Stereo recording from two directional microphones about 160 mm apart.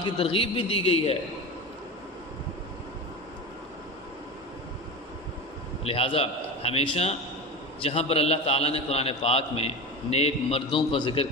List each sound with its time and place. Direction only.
0.0 s a man's voice: 35° left (ahead or behind)
5.9 s a man's voice: 35° left (ahead or behind)